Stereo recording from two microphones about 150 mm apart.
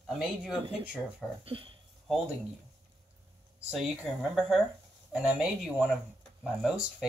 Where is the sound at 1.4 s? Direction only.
40° right (ahead or behind).